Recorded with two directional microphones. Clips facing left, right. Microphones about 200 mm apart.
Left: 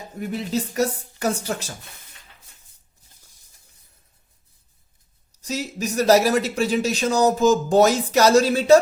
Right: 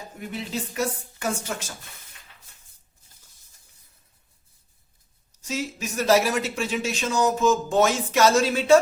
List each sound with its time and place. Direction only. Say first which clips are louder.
0.2 s speech: left 6 dB; 40° left (ahead or behind)
5.4 s speech: left 3 dB; 40° left (ahead or behind)